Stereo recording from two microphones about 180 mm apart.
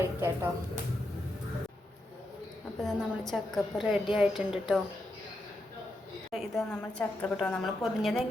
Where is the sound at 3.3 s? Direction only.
Centre (ahead or behind).